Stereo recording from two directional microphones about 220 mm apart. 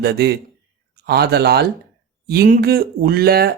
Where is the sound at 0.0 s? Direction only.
45° right (ahead or behind).